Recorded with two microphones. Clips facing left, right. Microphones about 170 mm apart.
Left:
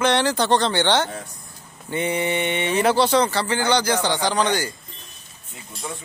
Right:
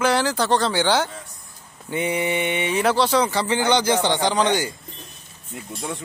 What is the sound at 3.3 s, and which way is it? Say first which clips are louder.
A man's voice: right 1 dB; 20° right (ahead or behind).